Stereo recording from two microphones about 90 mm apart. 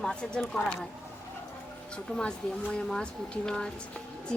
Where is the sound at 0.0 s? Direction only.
10° left (ahead or behind).